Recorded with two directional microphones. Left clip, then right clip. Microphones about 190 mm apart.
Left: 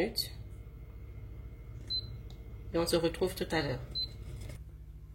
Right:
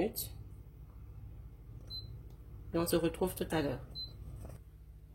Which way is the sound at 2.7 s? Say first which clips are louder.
Left 3 dB; 60° right (ahead or behind).